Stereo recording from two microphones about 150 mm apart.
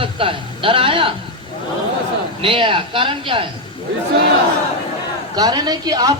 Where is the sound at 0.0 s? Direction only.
35° right (ahead or behind).